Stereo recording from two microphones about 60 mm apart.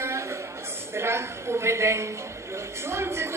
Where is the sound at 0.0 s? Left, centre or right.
Right.